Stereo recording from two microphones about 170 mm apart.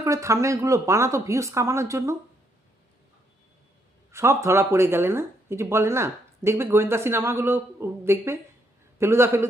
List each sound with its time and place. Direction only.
0.0 s speech: 20° right (ahead or behind)
4.1 s speech: 15° right (ahead or behind)